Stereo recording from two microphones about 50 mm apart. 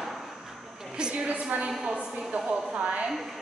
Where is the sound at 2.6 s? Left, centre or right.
Centre.